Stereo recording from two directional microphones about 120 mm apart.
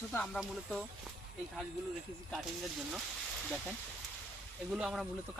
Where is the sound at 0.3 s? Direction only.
5° right (ahead or behind).